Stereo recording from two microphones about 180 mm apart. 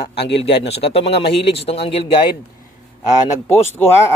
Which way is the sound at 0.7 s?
30° left (ahead or behind).